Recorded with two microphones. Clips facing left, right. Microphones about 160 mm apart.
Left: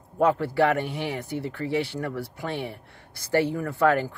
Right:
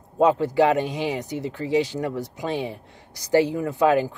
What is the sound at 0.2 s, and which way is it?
Speech, 20° right (ahead or behind).